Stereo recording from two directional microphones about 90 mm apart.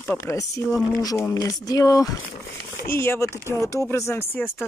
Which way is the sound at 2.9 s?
25° left (ahead or behind).